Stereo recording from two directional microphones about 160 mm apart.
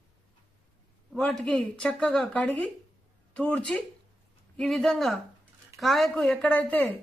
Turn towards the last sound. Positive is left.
turn(degrees=10)  # may be behind; listen again after turning